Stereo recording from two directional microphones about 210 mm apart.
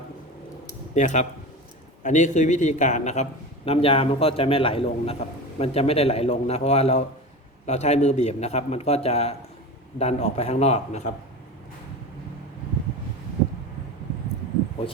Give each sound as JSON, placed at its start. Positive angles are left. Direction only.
{"t": 0.9, "sound": "a man's voice", "side_deg": 35}